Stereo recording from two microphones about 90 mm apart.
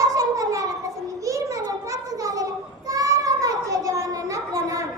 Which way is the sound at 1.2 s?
35° right (ahead or behind).